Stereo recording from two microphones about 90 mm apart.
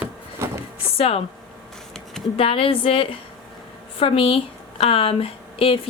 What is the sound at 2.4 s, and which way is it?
A woman's voice, 90° left.